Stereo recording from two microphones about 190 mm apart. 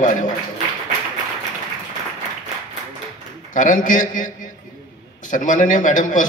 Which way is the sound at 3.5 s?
40° left (ahead or behind).